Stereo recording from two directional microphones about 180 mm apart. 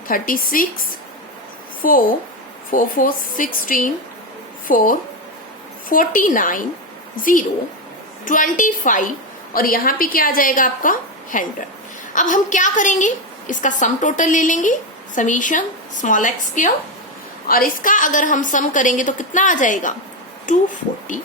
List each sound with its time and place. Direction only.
0.1 s a woman's voice: 50° left (ahead or behind)
1.8 s a woman's voice: 50° left (ahead or behind)
5.9 s a woman's voice: 50° left (ahead or behind)